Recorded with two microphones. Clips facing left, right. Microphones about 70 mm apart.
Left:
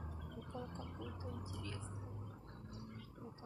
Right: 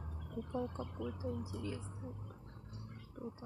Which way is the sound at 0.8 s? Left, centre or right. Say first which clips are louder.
Right 7 dB; centre.